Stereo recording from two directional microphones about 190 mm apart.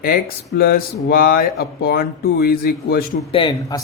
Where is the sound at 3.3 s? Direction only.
25° left (ahead or behind).